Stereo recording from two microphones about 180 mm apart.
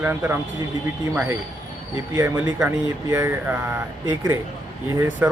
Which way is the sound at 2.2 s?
15° right (ahead or behind).